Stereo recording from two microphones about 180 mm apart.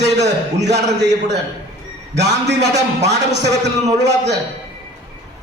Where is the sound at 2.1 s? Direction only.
70° right (ahead or behind).